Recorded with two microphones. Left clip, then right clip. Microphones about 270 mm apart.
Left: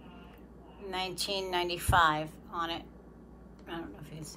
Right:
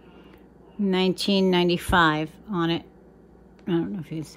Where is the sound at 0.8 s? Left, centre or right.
Right.